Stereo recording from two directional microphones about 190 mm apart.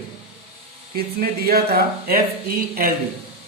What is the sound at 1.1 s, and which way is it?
Speech, 55° right (ahead or behind).